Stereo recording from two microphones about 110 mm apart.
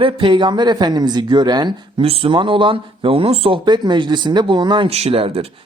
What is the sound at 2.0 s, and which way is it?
Speech, 60° right (ahead or behind).